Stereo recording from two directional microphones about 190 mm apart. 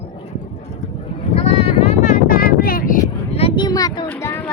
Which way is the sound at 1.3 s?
35° left (ahead or behind).